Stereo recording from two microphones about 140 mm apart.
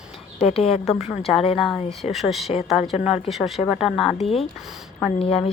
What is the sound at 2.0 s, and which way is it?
Speech, centre (ahead or behind).